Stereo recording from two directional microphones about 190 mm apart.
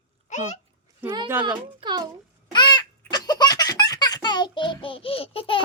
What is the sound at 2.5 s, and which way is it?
Baby laughter, 25° left (ahead or behind).